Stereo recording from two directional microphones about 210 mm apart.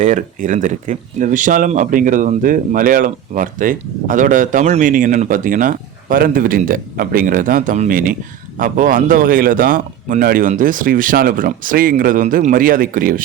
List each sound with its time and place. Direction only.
0.0 s speech: 35° right (ahead or behind)